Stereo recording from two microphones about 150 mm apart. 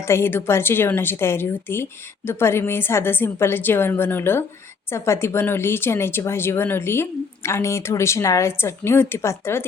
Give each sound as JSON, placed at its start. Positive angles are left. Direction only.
{"t": 0.0, "sound": "speech", "side_deg": 15}